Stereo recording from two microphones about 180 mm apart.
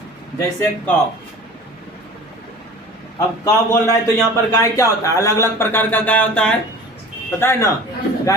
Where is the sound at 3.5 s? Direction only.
15° left (ahead or behind).